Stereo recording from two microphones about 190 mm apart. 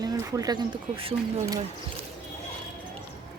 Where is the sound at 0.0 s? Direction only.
20° right (ahead or behind).